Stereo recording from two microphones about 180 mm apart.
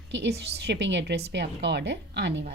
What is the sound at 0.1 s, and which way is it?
A woman's voice, 70° right (ahead or behind).